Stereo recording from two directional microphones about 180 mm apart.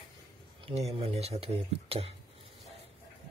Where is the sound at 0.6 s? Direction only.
35° right (ahead or behind).